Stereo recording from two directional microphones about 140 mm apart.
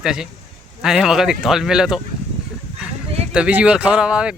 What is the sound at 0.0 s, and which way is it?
Speech, 5° right (ahead or behind).